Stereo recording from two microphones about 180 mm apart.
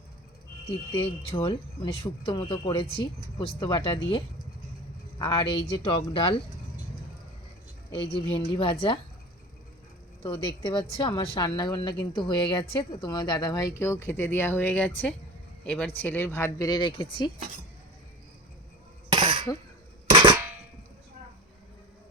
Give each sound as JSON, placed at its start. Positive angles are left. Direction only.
{"t": 0.9, "sound": "a woman's voice", "side_deg": 30}
{"t": 5.2, "sound": "a woman's voice", "side_deg": 25}
{"t": 8.3, "sound": "a woman's voice", "side_deg": 30}
{"t": 10.2, "sound": "a woman's voice", "side_deg": 25}
{"t": 19.1, "sound": "a sound", "side_deg": -30}
{"t": 20.1, "sound": "cap gun", "side_deg": -25}